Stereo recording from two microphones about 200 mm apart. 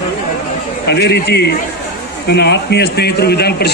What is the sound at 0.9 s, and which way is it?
A man's voice, 55° left (ahead or behind).